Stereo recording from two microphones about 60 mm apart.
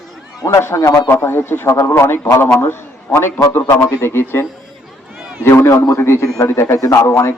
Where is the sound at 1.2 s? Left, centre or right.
Left.